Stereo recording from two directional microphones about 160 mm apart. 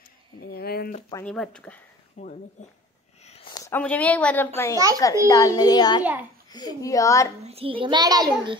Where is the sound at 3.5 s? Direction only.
25° left (ahead or behind).